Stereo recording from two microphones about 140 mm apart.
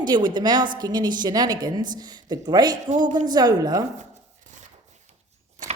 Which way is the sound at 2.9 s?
60° right (ahead or behind).